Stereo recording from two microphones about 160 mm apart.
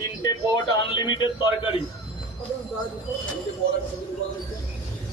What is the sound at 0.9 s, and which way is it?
Speech, 30° left (ahead or behind).